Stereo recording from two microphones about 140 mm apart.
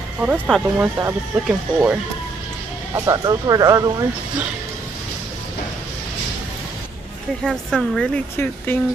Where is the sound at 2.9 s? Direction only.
25° right (ahead or behind).